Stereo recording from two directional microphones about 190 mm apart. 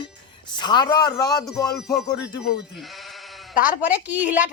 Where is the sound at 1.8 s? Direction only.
Centre (ahead or behind).